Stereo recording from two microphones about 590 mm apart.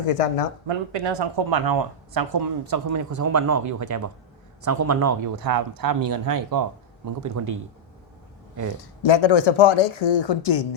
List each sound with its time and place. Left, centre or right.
0.1 s speech: left
1.1 s speech: right
8.8 s speech: left